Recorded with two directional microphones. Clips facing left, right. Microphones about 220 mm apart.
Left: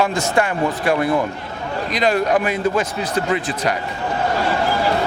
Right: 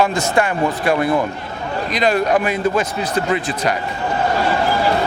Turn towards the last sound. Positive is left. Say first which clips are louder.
# right 1 dB
turn(degrees=-20)  # may be behind; listen again after turning